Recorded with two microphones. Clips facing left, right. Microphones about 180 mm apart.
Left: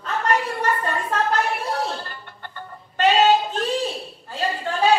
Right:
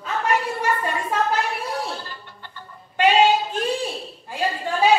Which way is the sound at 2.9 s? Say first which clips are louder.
Even; 10° right (ahead or behind).